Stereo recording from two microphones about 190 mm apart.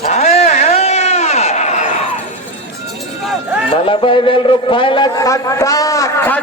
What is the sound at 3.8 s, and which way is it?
A man's voice, 30° left (ahead or behind).